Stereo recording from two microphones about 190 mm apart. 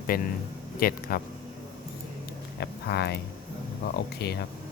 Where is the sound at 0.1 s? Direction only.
50° left (ahead or behind).